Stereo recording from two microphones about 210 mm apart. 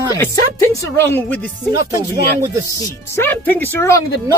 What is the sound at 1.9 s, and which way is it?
Speech, 15° right (ahead or behind).